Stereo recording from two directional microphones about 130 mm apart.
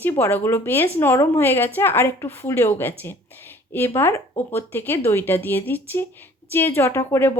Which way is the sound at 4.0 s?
15° left (ahead or behind).